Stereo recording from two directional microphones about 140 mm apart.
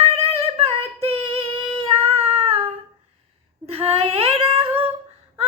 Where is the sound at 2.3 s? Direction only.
40° right (ahead or behind).